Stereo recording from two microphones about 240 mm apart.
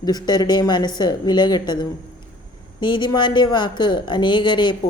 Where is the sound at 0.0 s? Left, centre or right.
Centre.